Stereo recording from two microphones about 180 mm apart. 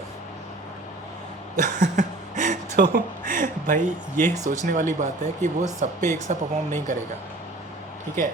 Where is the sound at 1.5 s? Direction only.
45° right (ahead or behind).